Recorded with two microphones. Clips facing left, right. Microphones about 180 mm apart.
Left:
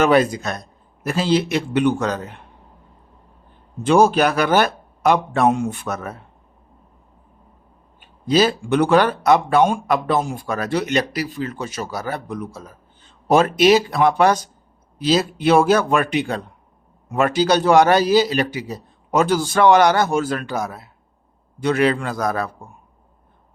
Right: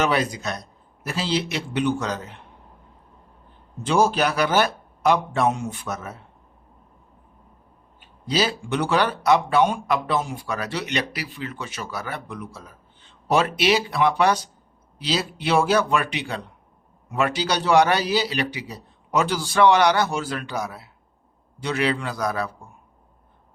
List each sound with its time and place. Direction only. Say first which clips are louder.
0.0 s speech: left 7 dB; 50° left (ahead or behind)
3.8 s a man's voice: left 5 dB; 55° left (ahead or behind)
8.3 s speech: left 7 dB; 50° left (ahead or behind)